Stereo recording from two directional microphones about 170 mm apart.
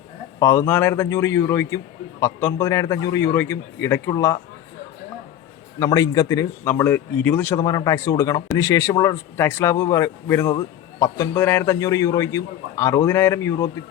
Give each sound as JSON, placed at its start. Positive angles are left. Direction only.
{"t": 0.3, "sound": "a man's voice", "side_deg": 15}
{"t": 5.8, "sound": "a man's voice", "side_deg": 20}